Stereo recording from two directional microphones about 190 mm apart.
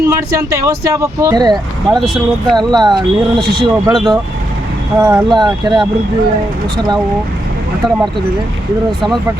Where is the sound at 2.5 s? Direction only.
20° right (ahead or behind).